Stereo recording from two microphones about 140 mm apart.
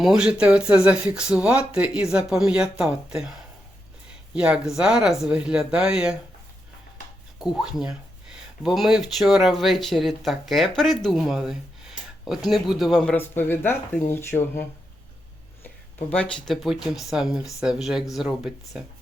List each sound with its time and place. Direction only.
0.0 s speech: 5° right (ahead or behind)
4.4 s speech: 5° right (ahead or behind)
7.3 s speech: 5° right (ahead or behind)
13.1 s speech: 15° left (ahead or behind); by 18.8 s centre (ahead or behind)